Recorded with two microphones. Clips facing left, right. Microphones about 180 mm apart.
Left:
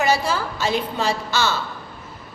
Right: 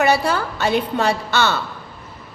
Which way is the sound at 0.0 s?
65° right (ahead or behind).